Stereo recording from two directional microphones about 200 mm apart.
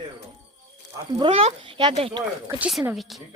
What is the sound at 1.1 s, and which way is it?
Speech, 25° right (ahead or behind).